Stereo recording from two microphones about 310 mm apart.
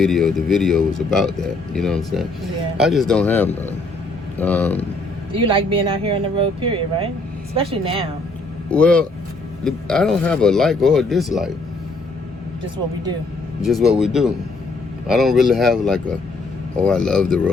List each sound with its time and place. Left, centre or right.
0.0 s speech: centre
5.3 s speech: centre
8.7 s speech: centre
13.6 s speech: centre